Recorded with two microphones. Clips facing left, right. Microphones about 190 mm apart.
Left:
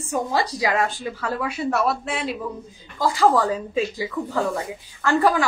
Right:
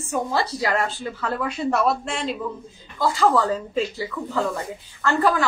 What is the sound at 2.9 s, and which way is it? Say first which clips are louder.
A woman's voice: left 1 dB; 15° left (ahead or behind).